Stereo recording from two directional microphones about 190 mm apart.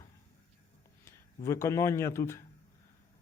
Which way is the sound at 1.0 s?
15° left (ahead or behind).